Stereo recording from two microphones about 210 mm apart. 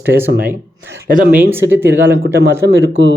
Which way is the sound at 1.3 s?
10° right (ahead or behind).